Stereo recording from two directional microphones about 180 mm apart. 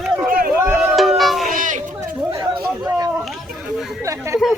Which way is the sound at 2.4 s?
20° right (ahead or behind).